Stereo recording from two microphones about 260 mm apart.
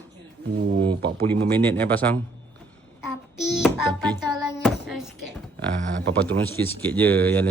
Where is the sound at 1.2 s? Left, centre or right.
Centre.